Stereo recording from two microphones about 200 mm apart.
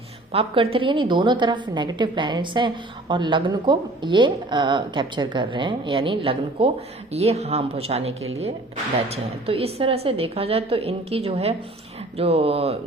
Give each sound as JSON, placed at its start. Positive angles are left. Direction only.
{"t": 0.3, "sound": "a woman's voice", "side_deg": -25}